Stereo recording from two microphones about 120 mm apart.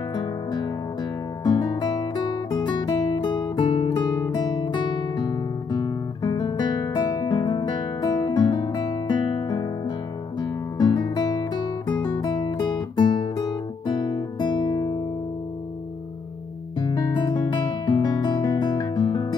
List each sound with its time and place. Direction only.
0.1 s music: 40° left (ahead or behind)
1.4 s guitar: 40° left (ahead or behind)
16.9 s guitar: 40° left (ahead or behind)